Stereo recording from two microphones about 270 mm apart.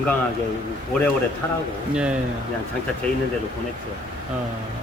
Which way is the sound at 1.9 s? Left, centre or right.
Centre.